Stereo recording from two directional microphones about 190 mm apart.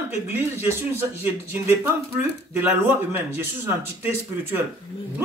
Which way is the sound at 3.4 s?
10° right (ahead or behind).